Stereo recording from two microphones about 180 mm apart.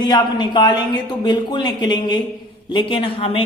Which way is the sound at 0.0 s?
25° left (ahead or behind).